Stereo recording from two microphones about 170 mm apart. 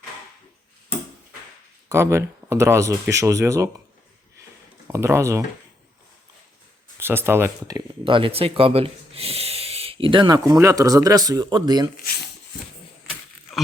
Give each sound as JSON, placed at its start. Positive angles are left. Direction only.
{"t": 1.9, "sound": "speech", "side_deg": -15}
{"t": 4.9, "sound": "speech", "side_deg": -15}
{"t": 7.0, "sound": "speech", "side_deg": -15}
{"t": 8.0, "sound": "speech", "side_deg": -30}